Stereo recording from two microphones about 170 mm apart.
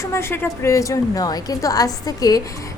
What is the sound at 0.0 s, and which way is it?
A woman's voice, 15° left (ahead or behind).